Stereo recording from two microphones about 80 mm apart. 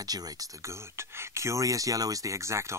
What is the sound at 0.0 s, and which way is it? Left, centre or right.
Speech, right.